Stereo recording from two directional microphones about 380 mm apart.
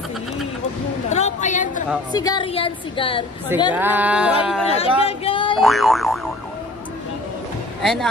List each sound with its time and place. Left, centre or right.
1.1 s a sound: centre
2.1 s a woman's voice: centre
3.7 s speech: centre
4.7 s speech: centre
5.6 s speech: centre
7.8 s speech: centre